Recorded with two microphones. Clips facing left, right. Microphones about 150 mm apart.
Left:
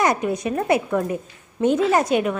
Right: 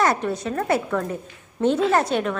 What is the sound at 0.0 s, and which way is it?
A woman's voice, 15° left (ahead or behind).